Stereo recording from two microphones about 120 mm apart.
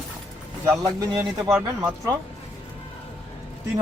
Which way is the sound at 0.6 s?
30° right (ahead or behind).